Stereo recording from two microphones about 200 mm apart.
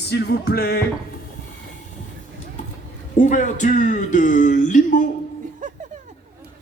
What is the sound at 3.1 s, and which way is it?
Speech, 40° left (ahead or behind).